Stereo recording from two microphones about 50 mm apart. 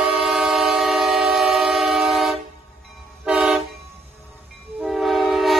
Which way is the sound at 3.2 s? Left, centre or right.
Centre.